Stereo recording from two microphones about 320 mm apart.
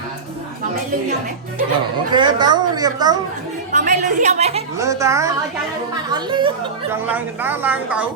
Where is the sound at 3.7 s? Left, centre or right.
Right.